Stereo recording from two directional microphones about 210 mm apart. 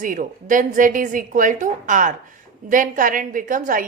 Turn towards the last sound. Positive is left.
turn(degrees=-40)  # may be behind; listen again after turning